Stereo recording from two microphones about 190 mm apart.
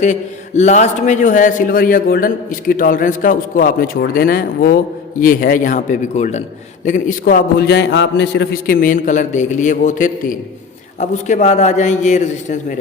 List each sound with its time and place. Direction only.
0.0 s a man's voice: 40° left (ahead or behind)